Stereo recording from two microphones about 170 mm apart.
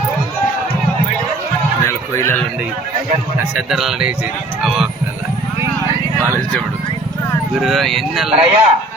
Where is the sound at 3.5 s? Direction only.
Centre (ahead or behind).